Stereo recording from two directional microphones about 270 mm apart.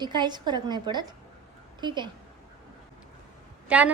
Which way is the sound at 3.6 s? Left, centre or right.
Centre.